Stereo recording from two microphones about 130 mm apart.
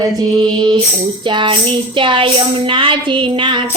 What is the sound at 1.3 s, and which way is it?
Music, 40° right (ahead or behind).